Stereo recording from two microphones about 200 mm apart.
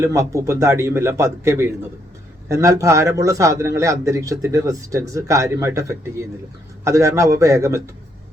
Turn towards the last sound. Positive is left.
turn(degrees=-15)  # may be behind; listen again after turning